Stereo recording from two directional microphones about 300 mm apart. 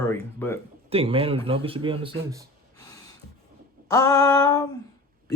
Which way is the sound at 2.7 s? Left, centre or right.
Centre.